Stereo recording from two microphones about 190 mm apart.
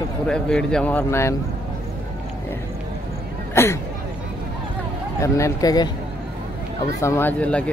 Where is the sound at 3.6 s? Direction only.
15° left (ahead or behind).